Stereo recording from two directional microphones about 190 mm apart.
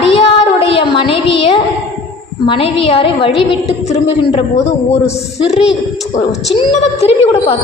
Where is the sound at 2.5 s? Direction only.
30° left (ahead or behind).